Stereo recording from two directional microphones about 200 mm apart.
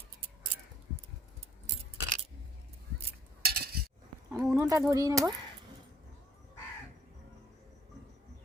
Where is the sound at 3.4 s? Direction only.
50° right (ahead or behind).